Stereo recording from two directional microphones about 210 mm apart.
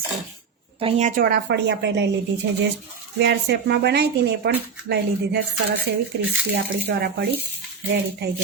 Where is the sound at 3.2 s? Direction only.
55° right (ahead or behind).